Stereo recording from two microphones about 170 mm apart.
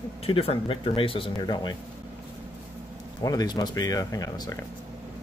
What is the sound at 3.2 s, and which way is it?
Speech, 20° left (ahead or behind).